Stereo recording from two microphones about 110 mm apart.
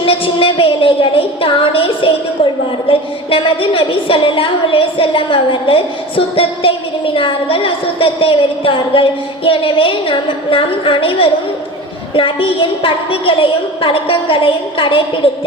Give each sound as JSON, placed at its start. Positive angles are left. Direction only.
{"t": 0.0, "sound": "a woman's voice", "side_deg": 55}